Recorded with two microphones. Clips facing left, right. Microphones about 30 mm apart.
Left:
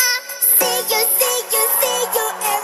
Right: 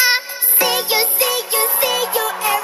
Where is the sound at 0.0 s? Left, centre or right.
Right.